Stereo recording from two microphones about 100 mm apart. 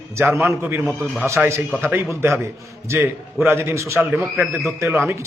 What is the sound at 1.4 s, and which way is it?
Speech, 10° right (ahead or behind).